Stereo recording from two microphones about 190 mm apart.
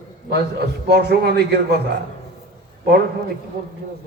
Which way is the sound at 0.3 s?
60° right (ahead or behind).